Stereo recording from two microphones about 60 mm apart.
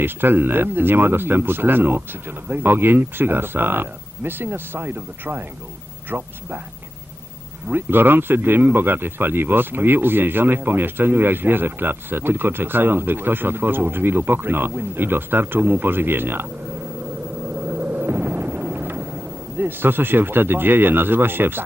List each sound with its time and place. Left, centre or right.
0.0 s speech: right
7.7 s speech: right
17.6 s vehicle: right
19.5 s speech: right